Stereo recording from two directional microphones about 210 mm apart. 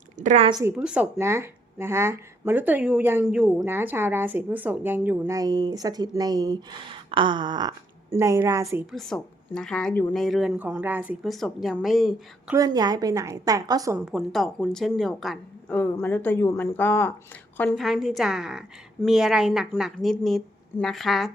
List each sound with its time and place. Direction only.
0.2 s a woman's voice: 35° right (ahead or behind)
0.6 s speech: 5° right (ahead or behind)
8.9 s a woman's voice: centre (ahead or behind)
12.5 s speech: 20° right (ahead or behind)
14.0 s a woman's voice: centre (ahead or behind)